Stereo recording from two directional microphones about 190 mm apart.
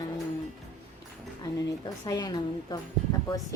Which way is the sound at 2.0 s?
20° left (ahead or behind).